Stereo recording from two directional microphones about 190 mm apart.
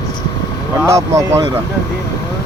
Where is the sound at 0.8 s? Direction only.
15° right (ahead or behind).